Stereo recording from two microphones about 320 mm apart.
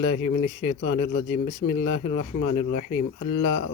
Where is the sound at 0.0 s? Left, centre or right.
Left.